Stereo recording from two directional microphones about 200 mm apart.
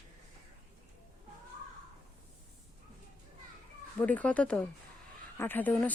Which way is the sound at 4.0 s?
5° left (ahead or behind).